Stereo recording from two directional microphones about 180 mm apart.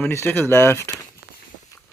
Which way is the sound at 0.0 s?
10° left (ahead or behind).